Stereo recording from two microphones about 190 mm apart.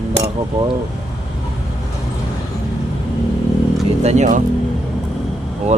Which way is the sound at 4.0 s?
35° right (ahead or behind).